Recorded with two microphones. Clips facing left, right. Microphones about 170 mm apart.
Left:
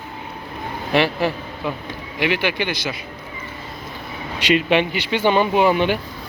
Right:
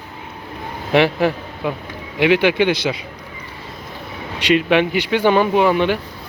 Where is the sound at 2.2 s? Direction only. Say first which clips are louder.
Right 7 dB; 65° right (ahead or behind).